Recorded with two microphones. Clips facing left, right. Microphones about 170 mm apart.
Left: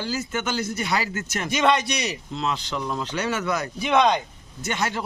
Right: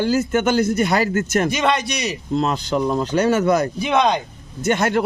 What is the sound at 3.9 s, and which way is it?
Speech, 20° right (ahead or behind).